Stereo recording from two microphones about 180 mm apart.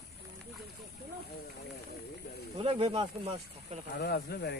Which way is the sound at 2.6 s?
30° right (ahead or behind).